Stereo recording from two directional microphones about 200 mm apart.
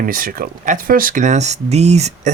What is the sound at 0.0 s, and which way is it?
Speech, 45° right (ahead or behind).